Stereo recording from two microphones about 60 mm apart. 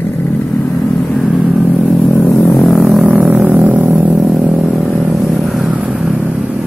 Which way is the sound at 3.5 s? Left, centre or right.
Right.